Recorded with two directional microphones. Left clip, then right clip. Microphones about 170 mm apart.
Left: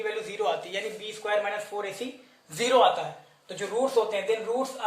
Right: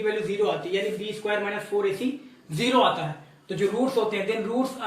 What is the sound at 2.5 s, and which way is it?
Speech, 45° left (ahead or behind).